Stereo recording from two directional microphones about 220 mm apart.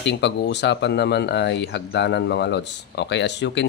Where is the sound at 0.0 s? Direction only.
50° left (ahead or behind).